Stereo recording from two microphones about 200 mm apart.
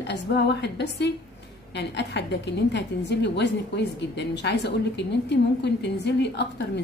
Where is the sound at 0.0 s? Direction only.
60° left (ahead or behind).